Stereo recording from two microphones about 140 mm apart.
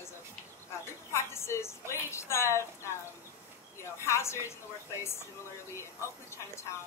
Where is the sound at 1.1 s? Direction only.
20° left (ahead or behind).